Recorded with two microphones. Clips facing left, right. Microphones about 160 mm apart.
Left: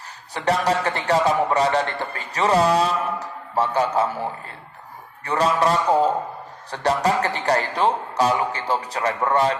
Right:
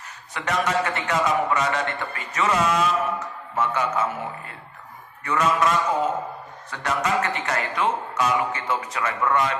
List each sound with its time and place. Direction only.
0.3 s a man's voice: 35° left (ahead or behind)